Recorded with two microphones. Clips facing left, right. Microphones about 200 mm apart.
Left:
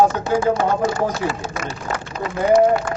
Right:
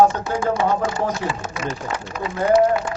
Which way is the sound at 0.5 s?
45° left (ahead or behind).